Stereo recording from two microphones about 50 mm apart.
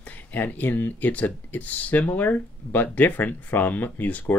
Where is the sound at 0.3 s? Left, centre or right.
Left.